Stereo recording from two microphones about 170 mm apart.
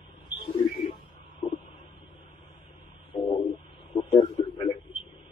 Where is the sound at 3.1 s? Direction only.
25° left (ahead or behind).